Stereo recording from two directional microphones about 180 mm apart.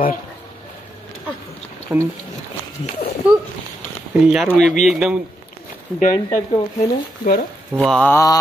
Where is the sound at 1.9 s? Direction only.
10° right (ahead or behind).